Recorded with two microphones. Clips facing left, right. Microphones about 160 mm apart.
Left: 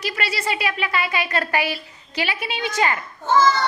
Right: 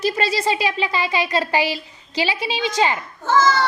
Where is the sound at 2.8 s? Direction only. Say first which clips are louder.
Right 2 dB; 20° right (ahead or behind).